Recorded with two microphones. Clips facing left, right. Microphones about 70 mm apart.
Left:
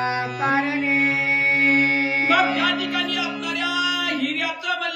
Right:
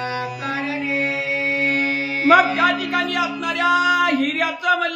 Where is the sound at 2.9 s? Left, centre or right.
Right.